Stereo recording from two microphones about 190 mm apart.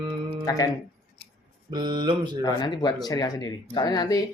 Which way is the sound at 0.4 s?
20° left (ahead or behind).